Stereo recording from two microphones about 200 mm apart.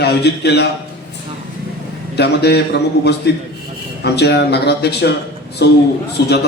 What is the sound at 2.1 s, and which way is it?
Speech, 55° left (ahead or behind).